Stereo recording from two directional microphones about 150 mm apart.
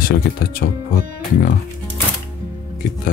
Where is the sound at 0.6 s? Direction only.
75° left (ahead or behind).